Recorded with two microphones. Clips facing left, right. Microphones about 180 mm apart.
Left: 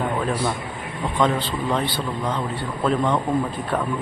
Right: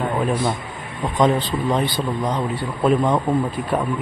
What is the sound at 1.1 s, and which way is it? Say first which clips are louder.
A man's voice: right 4 dB; 15° right (ahead or behind).